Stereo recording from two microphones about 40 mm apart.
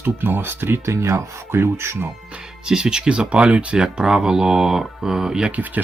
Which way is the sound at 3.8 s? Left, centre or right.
Centre.